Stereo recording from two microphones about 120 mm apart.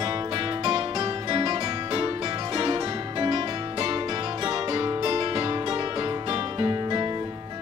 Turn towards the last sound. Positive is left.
turn(degrees=-35)  # may be behind; listen again after turning